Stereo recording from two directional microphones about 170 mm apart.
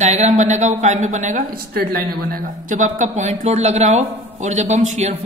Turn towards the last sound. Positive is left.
turn(degrees=-45)  # may be behind; listen again after turning